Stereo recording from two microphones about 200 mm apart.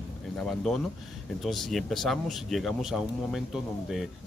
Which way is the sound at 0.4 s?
5° left (ahead or behind).